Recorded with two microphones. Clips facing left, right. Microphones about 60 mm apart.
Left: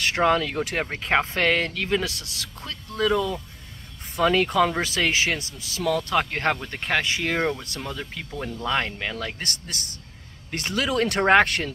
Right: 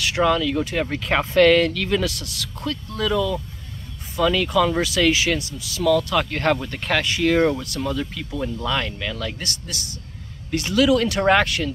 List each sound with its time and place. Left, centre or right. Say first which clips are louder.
0.0 s speech: right 1 dB; left
0.8 s speech: right 1 dB; left
7.1 s speech: right 6 dB; left
7.3 s speech: right 7 dB; centre
8.6 s speech: left 3 dB; left